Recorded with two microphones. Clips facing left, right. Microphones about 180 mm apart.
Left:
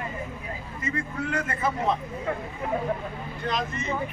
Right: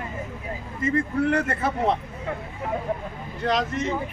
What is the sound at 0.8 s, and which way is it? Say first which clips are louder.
A man's voice: right 8 dB; 60° right (ahead or behind).